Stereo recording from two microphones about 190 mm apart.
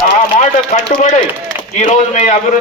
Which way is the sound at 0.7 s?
40° left (ahead or behind).